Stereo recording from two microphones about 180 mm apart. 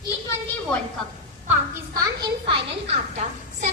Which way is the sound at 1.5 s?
20° right (ahead or behind).